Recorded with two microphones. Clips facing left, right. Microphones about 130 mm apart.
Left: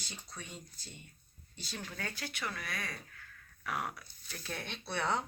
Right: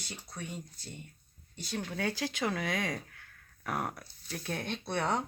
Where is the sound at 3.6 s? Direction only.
45° right (ahead or behind).